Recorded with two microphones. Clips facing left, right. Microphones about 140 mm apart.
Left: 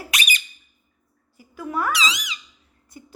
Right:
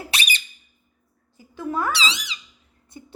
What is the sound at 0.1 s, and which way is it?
Squeak, 30° right (ahead or behind).